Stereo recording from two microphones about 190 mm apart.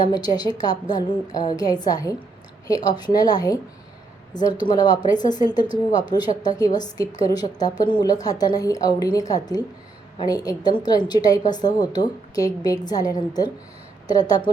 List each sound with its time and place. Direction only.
0.1 s a woman's voice: 20° left (ahead or behind)
4.6 s a woman's voice: 20° left (ahead or behind)